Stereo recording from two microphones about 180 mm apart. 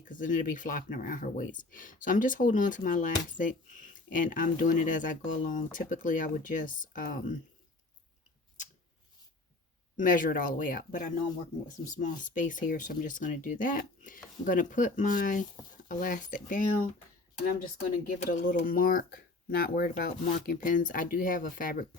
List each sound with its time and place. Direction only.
0.0 s speech: 45° left (ahead or behind)
10.0 s speech: 50° left (ahead or behind)